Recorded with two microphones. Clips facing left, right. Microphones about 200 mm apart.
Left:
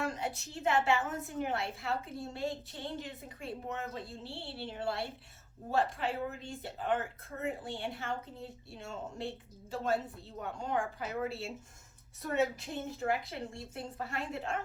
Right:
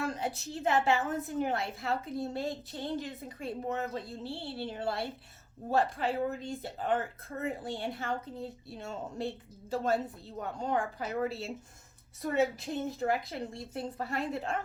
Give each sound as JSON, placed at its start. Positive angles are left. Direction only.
{"t": 0.0, "sound": "a woman's voice", "side_deg": -35}
{"t": 12.5, "sound": "a woman's voice", "side_deg": -40}